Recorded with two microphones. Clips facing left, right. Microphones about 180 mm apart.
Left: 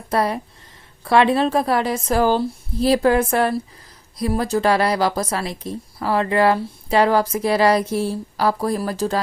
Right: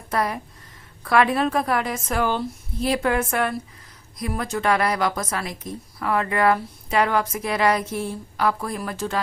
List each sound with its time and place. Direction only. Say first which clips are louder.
0.1 s a woman's voice: left 4 dB; 30° left (ahead or behind)